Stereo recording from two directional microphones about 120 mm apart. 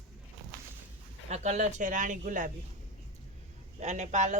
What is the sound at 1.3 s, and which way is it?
Speech, 75° right (ahead or behind).